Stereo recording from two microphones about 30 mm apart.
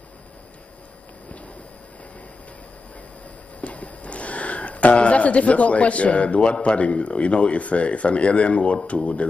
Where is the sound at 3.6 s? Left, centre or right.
Left.